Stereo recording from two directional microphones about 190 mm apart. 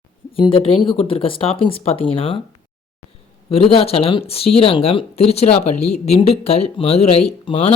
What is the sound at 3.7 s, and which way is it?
Speech, 30° left (ahead or behind).